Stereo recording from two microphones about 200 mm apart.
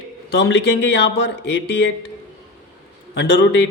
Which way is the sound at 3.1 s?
60° left (ahead or behind).